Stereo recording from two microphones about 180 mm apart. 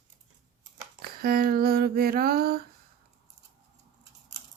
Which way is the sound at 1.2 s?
55° right (ahead or behind).